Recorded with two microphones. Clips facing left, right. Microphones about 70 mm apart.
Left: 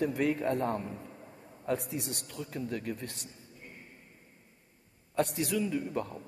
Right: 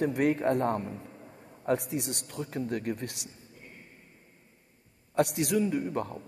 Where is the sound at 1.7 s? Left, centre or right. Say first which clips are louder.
Right 4 dB; right.